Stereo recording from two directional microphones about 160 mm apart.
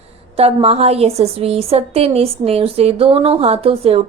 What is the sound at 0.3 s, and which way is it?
A woman's voice, 40° right (ahead or behind).